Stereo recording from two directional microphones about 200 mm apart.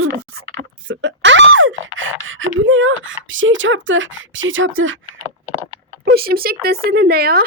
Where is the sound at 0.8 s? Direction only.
65° right (ahead or behind).